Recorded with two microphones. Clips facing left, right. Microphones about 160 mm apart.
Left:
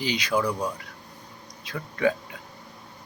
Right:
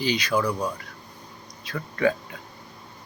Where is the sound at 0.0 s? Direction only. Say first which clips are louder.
Right 1 dB; 20° left (ahead or behind).